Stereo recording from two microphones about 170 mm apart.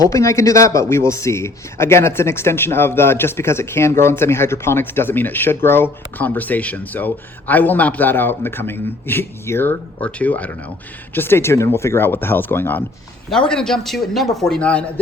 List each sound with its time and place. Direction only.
0.0 s speech: 20° left (ahead or behind)